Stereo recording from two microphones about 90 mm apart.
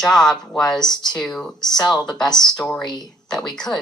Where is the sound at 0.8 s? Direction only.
50° left (ahead or behind).